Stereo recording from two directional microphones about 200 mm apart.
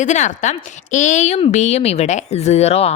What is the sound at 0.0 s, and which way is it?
Speech, 35° left (ahead or behind).